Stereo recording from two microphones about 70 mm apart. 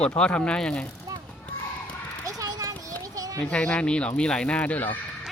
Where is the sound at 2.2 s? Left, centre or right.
Right.